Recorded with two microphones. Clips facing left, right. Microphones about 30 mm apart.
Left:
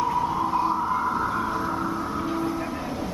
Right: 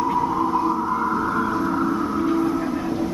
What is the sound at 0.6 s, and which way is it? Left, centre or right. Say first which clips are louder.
Vehicle: right 2 dB; centre.